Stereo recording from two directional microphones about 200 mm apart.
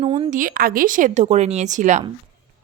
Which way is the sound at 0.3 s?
45° right (ahead or behind).